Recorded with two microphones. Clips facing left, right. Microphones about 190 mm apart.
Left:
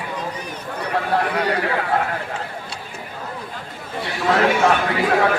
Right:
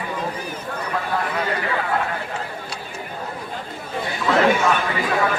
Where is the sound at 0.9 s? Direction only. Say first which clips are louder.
Left 4 dB; 65° left (ahead or behind).